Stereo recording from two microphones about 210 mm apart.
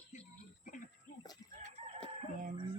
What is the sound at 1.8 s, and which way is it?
Chicken, 30° right (ahead or behind).